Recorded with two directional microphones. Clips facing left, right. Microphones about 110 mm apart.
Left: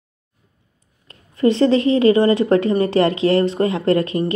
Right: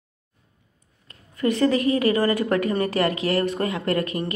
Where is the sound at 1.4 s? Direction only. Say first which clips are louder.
Left 5 dB; 30° left (ahead or behind).